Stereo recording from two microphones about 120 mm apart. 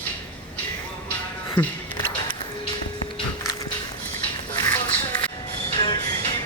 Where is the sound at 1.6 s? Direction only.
15° left (ahead or behind).